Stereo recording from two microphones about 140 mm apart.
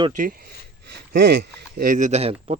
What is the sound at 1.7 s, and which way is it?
Speech, 75° right (ahead or behind).